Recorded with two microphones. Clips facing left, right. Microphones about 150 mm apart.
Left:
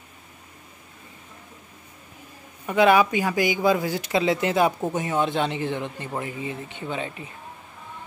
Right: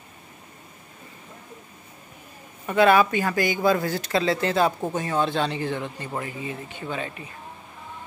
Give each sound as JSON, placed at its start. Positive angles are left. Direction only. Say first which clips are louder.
{"t": 2.6, "sound": "speech", "louder": "even", "side_deg": 15}